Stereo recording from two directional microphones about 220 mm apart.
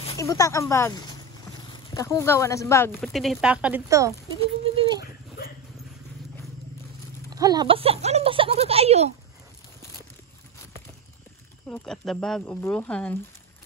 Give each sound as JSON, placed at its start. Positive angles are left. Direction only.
{"t": 0.2, "sound": "speech", "side_deg": 15}
{"t": 4.4, "sound": "a sound", "side_deg": -25}
{"t": 7.2, "sound": "speech", "side_deg": -15}
{"t": 11.6, "sound": "speech", "side_deg": 5}